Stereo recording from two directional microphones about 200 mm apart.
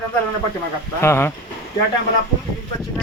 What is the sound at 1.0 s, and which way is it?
Speech, 10° left (ahead or behind).